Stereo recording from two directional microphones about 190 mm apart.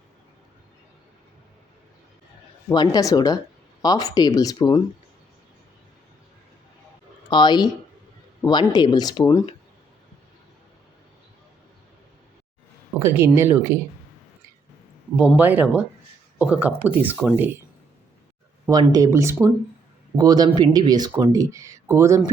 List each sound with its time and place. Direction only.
2.6 s speech: 20° left (ahead or behind)
7.3 s speech: 25° left (ahead or behind)
13.0 s speech: 10° right (ahead or behind)
15.4 s speech: 10° right (ahead or behind)
18.7 s speech: 20° right (ahead or behind)